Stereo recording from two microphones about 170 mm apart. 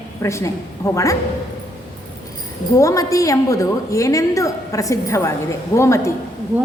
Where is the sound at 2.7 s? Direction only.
20° left (ahead or behind).